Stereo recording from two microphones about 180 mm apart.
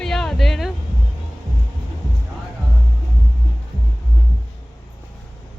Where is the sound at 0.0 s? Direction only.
5° left (ahead or behind).